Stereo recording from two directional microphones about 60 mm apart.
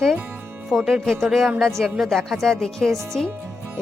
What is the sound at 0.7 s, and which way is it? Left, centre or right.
Speech, centre.